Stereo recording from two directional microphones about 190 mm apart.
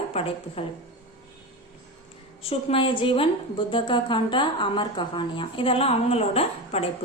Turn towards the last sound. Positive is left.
turn(degrees=30)  # may be behind; listen again after turning